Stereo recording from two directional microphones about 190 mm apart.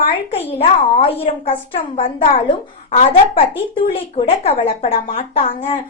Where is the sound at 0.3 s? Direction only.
30° left (ahead or behind).